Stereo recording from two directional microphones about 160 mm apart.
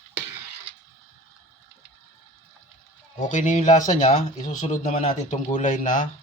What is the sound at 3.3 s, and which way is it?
Speech, 45° left (ahead or behind).